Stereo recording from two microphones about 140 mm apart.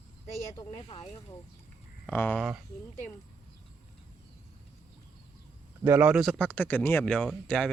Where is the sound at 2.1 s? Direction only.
15° left (ahead or behind).